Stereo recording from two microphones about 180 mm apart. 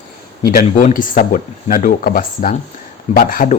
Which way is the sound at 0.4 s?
50° left (ahead or behind).